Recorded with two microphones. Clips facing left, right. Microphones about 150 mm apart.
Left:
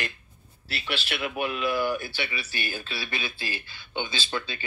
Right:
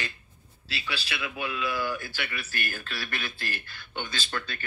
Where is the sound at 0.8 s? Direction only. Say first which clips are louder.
Left 4 dB; 20° left (ahead or behind).